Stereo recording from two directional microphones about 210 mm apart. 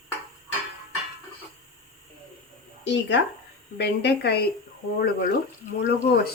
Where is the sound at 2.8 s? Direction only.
60° left (ahead or behind).